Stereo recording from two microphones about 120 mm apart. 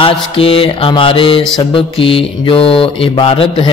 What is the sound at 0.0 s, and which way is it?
Speech, 50° left (ahead or behind).